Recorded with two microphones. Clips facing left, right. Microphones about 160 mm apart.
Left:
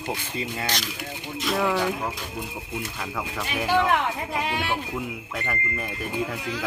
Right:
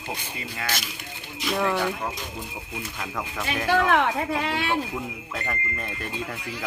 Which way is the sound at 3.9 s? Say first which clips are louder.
Right 3 dB; 70° right (ahead or behind).